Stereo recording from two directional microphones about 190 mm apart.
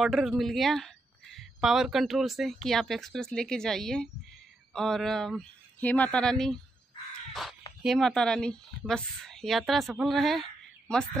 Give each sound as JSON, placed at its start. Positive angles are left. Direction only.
{"t": 0.0, "sound": "speech", "side_deg": 0}
{"t": 7.8, "sound": "speech", "side_deg": 0}